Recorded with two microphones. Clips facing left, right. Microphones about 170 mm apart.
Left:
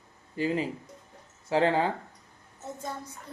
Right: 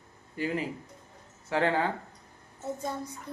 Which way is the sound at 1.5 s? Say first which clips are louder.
Left 3 dB; 25° left (ahead or behind).